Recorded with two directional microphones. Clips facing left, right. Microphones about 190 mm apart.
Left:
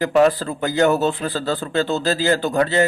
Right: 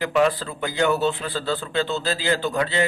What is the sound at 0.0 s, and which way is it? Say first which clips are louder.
Speech: left 5 dB; 40° left (ahead or behind).